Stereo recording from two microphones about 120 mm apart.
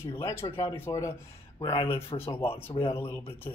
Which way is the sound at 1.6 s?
50° left (ahead or behind).